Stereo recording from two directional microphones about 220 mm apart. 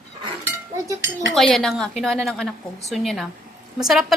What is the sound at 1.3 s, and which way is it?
A woman's voice, centre (ahead or behind).